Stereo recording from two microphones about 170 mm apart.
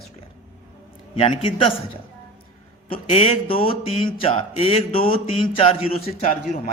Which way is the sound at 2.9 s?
35° left (ahead or behind).